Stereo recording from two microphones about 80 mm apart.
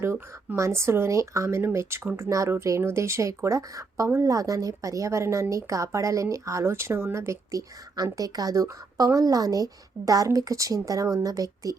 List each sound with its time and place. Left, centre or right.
0.0 s speech: right
7.9 s a woman's voice: right